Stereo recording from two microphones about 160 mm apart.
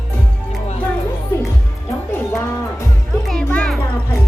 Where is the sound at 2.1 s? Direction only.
20° left (ahead or behind).